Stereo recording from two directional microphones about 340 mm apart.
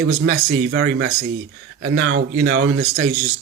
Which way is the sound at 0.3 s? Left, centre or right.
Right.